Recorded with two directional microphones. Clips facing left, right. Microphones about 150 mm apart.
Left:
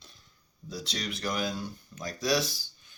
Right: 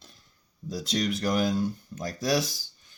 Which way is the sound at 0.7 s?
45° right (ahead or behind).